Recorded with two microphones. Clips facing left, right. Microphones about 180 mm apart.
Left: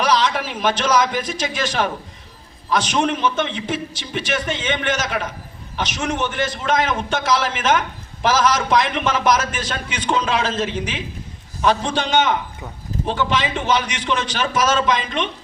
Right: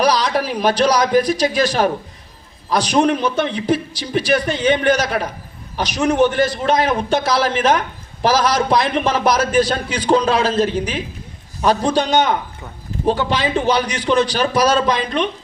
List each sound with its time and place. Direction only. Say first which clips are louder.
0.0 s a man's voice: right 2 dB; 35° right (ahead or behind)